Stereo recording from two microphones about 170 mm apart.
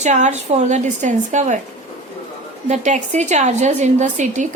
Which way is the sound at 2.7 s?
45° right (ahead or behind).